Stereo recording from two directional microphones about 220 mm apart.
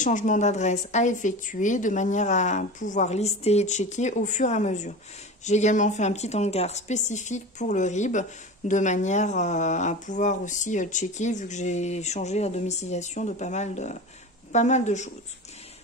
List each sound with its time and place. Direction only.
0.0 s a woman's voice: 35° left (ahead or behind)